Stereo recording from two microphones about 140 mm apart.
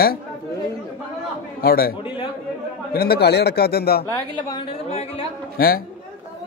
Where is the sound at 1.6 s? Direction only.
90° left.